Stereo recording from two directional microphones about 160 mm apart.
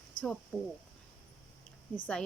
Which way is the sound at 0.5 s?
5° left (ahead or behind).